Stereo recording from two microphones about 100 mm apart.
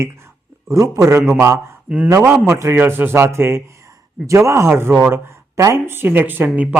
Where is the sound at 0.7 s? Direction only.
35° right (ahead or behind).